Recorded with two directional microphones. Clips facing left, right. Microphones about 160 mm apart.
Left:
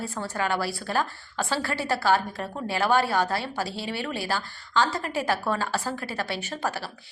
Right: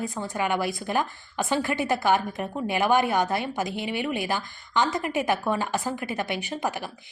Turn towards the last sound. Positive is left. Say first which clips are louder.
# right 1 dB
turn(degrees=-15)  # may be behind; listen again after turning